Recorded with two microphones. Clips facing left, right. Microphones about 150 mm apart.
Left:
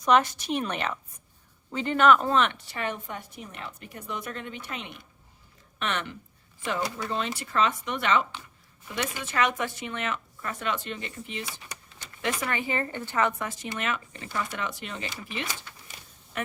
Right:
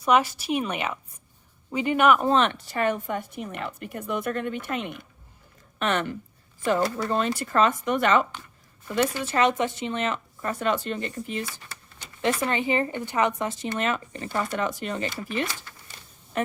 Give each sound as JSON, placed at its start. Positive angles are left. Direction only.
{"t": 0.0, "sound": "speech", "side_deg": -5}
{"t": 2.3, "sound": "a woman's voice", "side_deg": -35}
{"t": 9.0, "sound": "speech", "side_deg": -30}
{"t": 11.7, "sound": "a sound", "side_deg": 15}
{"t": 12.2, "sound": "speech", "side_deg": -25}
{"t": 16.3, "sound": "speech", "side_deg": -35}